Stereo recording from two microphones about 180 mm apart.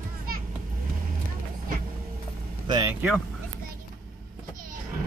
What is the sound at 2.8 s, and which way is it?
Speech, 10° right (ahead or behind).